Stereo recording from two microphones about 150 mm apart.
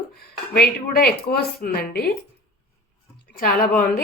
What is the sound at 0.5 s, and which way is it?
Speech, 90° left.